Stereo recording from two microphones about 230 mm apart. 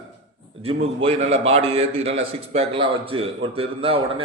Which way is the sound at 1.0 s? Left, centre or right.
Right.